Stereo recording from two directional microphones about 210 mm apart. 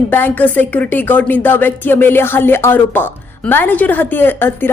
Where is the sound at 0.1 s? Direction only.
10° left (ahead or behind).